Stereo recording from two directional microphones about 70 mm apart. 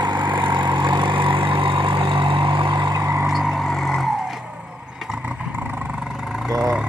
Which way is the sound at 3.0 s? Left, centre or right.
Right.